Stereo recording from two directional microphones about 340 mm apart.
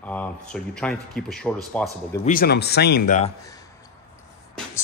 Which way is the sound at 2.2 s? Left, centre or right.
Left.